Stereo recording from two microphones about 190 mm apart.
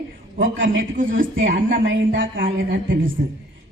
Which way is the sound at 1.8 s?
75° right (ahead or behind).